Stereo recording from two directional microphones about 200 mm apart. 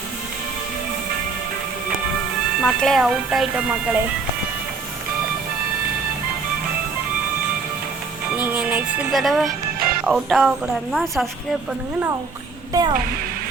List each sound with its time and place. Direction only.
2.6 s speech: centre (ahead or behind)
8.4 s music: 10° right (ahead or behind)
10.1 s speech: centre (ahead or behind)
12.7 s music: 20° right (ahead or behind)